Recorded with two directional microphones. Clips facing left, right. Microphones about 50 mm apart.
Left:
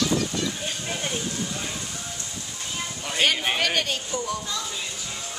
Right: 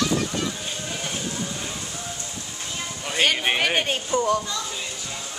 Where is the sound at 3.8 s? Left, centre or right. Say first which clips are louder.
Right 5 dB; right.